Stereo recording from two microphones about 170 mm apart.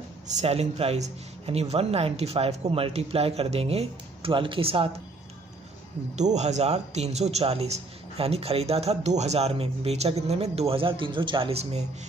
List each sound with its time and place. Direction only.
0.4 s a man's voice: 35° right (ahead or behind)
6.1 s a man's voice: 40° right (ahead or behind)